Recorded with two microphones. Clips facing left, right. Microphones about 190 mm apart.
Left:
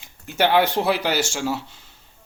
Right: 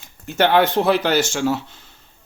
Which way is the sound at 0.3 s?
10° left (ahead or behind).